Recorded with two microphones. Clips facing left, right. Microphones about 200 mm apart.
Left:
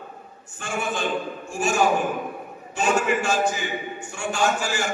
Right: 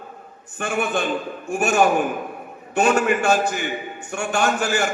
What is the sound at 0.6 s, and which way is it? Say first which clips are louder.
A man's voice: right 4 dB; 60° right (ahead or behind).